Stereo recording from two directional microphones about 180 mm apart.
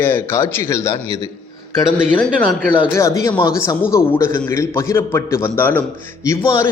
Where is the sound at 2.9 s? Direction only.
15° left (ahead or behind).